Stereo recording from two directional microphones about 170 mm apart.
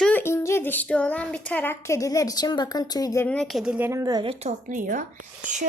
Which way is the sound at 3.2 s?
5° left (ahead or behind).